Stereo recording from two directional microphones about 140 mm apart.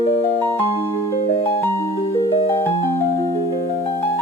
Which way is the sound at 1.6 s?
20° left (ahead or behind).